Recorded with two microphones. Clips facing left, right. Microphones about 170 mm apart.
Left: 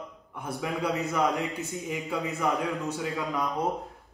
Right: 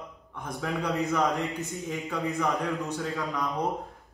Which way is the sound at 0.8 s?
10° left (ahead or behind).